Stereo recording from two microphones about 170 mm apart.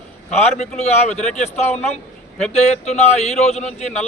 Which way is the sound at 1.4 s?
40° left (ahead or behind).